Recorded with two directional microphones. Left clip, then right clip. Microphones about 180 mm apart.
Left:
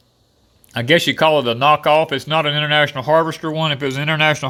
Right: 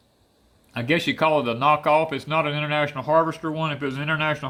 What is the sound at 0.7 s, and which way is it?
Speech, 50° left (ahead or behind).